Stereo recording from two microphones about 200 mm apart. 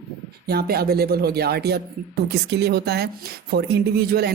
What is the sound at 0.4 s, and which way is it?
Speech, 50° right (ahead or behind).